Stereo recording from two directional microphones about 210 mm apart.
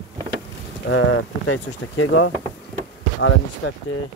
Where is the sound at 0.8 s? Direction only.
70° left (ahead or behind).